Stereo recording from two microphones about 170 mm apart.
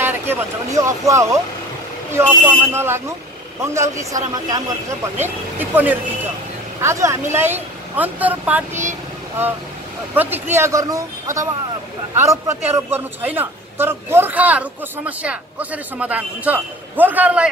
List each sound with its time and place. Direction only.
0.0 s a man's voice: 15° right (ahead or behind)
10.5 s a man's voice: 15° right (ahead or behind)